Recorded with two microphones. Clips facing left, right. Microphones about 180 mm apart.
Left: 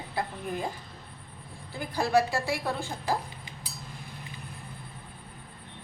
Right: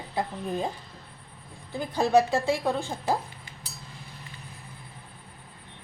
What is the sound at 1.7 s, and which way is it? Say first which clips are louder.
A woman's voice: right 4 dB; 20° right (ahead or behind).